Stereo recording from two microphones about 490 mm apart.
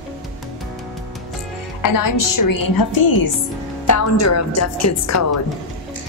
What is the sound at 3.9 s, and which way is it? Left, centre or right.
Speech, left.